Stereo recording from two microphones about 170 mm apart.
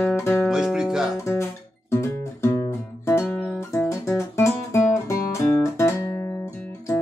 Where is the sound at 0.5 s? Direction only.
5° right (ahead or behind).